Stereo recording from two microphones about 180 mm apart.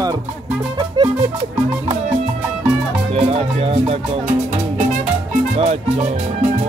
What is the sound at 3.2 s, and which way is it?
Speech, 35° right (ahead or behind).